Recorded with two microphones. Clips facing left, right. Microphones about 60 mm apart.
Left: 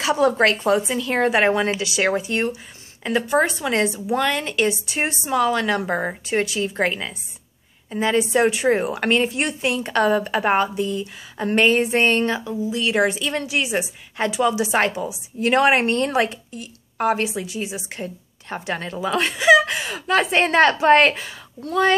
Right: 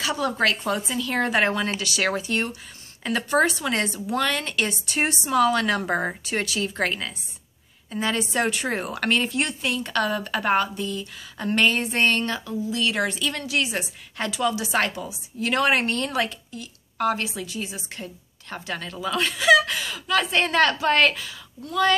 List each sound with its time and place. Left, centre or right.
0.0 s speech: left
1.8 s a woman's voice: centre
18.0 s speech: left